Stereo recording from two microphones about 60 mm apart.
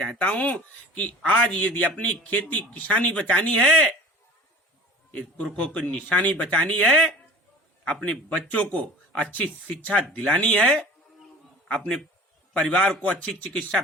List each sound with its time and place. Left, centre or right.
0.0 s a man's voice: left
5.5 s a man's voice: centre
12.5 s a man's voice: centre